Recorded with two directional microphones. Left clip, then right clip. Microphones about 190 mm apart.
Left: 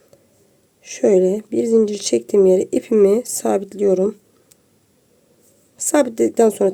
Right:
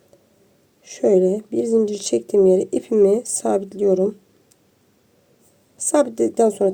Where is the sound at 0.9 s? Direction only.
10° left (ahead or behind).